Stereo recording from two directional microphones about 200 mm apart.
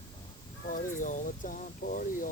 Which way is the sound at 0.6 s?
45° left (ahead or behind).